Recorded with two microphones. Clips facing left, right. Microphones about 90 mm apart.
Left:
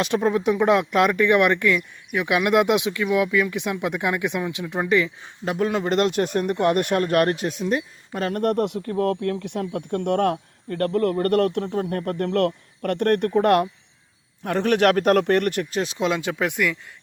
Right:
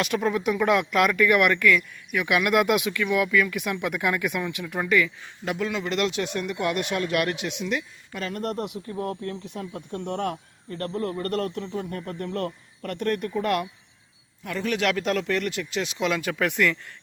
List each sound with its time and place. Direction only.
0.0 s speech: 30° left (ahead or behind); by 15.8 s 55° left (ahead or behind)
15.8 s speech: 30° left (ahead or behind); by 16.7 s 15° left (ahead or behind)